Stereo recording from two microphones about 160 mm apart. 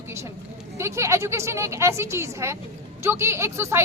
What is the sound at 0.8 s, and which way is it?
A woman's voice, 15° right (ahead or behind).